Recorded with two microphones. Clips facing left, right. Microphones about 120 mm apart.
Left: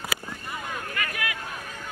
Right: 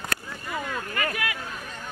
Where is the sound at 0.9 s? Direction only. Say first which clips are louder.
Right 3 dB; 35° right (ahead or behind).